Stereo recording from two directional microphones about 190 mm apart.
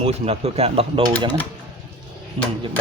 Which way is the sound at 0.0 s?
35° right (ahead or behind).